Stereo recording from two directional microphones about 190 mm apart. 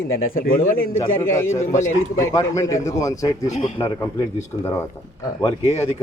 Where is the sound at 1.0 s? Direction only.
15° left (ahead or behind).